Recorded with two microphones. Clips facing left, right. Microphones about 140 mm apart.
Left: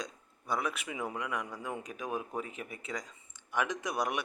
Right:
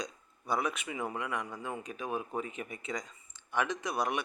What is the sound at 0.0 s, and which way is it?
Speech, centre (ahead or behind).